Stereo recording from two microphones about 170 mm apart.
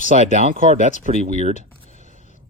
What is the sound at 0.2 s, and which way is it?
Speech, 45° right (ahead or behind).